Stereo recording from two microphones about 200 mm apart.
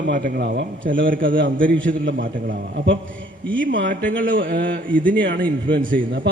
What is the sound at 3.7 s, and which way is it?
Speech, 70° right (ahead or behind).